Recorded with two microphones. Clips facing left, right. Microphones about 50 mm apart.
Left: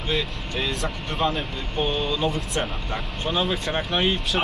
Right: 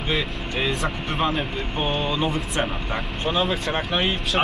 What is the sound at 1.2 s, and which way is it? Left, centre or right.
Speech, centre.